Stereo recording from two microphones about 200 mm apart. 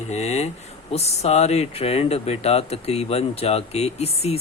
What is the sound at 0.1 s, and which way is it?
Speech, 35° left (ahead or behind).